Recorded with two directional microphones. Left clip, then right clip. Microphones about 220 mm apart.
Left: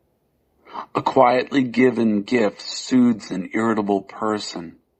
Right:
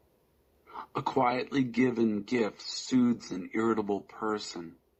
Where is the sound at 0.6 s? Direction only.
45° left (ahead or behind).